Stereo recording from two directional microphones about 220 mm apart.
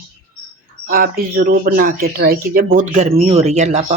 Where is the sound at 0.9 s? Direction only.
40° right (ahead or behind).